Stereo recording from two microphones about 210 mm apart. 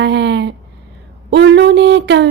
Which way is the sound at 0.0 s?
55° right (ahead or behind).